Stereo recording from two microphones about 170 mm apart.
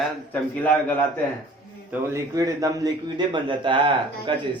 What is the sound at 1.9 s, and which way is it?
A man's voice, 15° right (ahead or behind).